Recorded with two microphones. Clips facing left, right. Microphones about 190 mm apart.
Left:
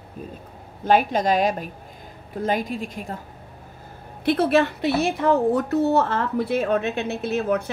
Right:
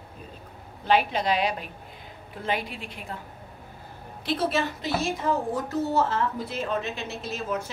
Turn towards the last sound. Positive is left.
turn(degrees=60)  # may be behind; listen again after turning